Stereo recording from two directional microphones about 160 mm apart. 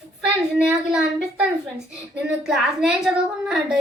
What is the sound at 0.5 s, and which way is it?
Speech, 5° right (ahead or behind).